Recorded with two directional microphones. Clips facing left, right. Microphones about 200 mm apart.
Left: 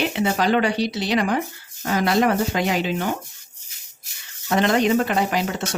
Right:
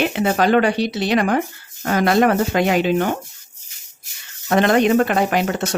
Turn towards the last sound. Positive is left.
turn(degrees=-55)  # may be behind; listen again after turning